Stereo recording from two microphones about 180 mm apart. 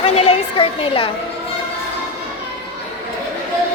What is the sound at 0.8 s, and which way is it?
Speech, 30° left (ahead or behind).